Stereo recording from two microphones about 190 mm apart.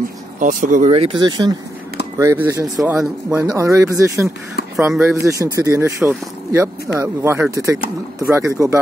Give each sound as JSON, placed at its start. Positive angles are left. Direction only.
{"t": 0.4, "sound": "speech", "side_deg": -45}
{"t": 1.2, "sound": "speech", "side_deg": -20}
{"t": 2.8, "sound": "speech", "side_deg": -5}
{"t": 4.8, "sound": "speech", "side_deg": -5}
{"t": 5.1, "sound": "speech", "side_deg": -15}